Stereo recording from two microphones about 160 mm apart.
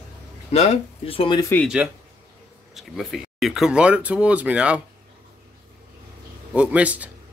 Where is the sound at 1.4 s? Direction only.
15° left (ahead or behind).